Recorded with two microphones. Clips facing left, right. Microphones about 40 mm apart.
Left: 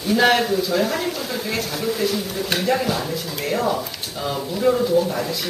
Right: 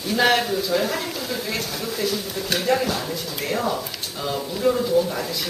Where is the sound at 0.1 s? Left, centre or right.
Centre.